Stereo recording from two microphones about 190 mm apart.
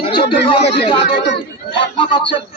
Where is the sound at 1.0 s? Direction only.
65° left (ahead or behind).